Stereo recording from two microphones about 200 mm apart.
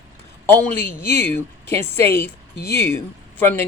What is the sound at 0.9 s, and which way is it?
A woman's voice, 10° left (ahead or behind).